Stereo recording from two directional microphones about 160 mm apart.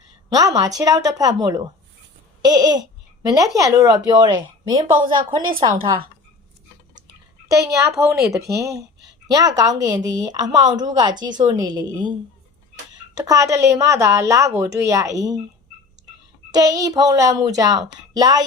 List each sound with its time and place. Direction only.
0.3 s a woman's voice: 20° right (ahead or behind)
2.4 s babbling: 25° right (ahead or behind)
3.2 s a woman's voice: 20° right (ahead or behind)
7.4 s a woman's voice: 20° right (ahead or behind)
13.1 s a woman's voice: 20° right (ahead or behind)
16.5 s a woman's voice: 25° right (ahead or behind)